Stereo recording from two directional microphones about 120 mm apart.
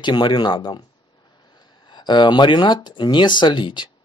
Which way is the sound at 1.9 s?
40° left (ahead or behind).